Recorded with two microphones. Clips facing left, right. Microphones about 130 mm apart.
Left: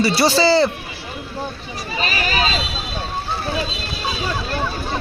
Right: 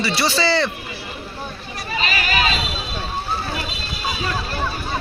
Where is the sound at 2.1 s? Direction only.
35° left (ahead or behind).